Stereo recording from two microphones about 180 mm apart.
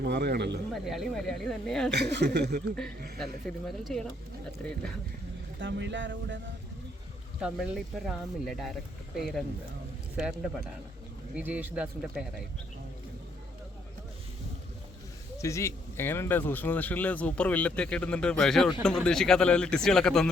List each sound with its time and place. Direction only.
0.0 s speech: 65° right (ahead or behind)
0.7 s speech: centre (ahead or behind)
1.9 s speech: 70° right (ahead or behind)
3.7 s speech: centre (ahead or behind)
5.5 s speech: 85° right
7.4 s speech: centre (ahead or behind)
15.4 s speech: 15° left (ahead or behind)